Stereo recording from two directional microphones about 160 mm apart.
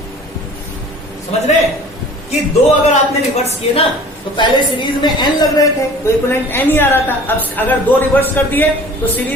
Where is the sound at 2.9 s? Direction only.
40° left (ahead or behind).